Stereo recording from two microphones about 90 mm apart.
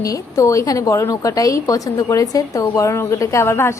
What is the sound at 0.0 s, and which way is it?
A woman's voice, 40° left (ahead or behind).